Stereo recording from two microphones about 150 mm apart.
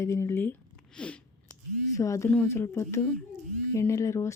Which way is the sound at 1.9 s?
20° left (ahead or behind).